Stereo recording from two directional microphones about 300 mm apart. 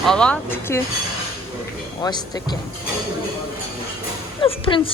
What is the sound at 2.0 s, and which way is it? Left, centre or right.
Speech, centre.